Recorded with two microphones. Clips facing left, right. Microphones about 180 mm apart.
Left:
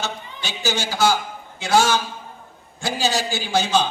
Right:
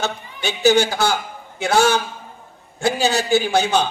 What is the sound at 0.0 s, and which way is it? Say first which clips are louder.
A man's voice: right 5 dB; 60° right (ahead or behind).